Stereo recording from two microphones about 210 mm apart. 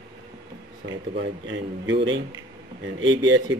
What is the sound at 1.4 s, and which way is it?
Speech, 60° right (ahead or behind).